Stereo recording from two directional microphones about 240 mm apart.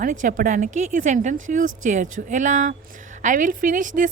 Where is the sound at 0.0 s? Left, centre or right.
Right.